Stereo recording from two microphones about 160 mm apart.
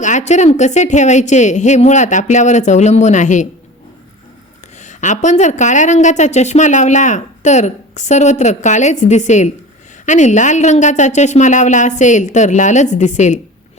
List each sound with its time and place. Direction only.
0.0 s a woman's voice: 50° left (ahead or behind)
4.8 s a woman's voice: 50° left (ahead or behind)